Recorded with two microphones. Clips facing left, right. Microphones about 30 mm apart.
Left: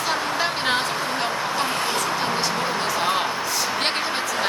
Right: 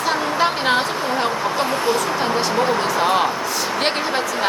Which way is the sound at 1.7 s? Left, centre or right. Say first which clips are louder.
Right 5 dB; left.